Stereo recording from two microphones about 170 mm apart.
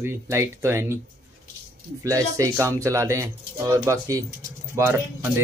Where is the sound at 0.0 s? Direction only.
15° right (ahead or behind).